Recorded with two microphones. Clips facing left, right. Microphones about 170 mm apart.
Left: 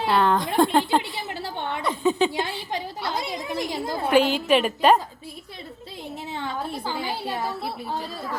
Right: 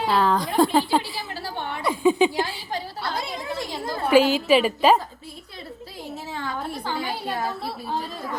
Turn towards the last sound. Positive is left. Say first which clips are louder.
# right 1 dB
turn(degrees=20)  # may be behind; listen again after turning